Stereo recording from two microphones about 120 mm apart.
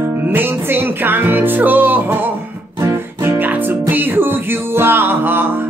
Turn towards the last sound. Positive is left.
turn(degrees=-15)  # may be behind; listen again after turning